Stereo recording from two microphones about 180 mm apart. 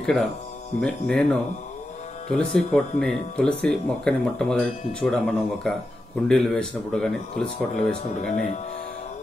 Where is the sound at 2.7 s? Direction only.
5° left (ahead or behind).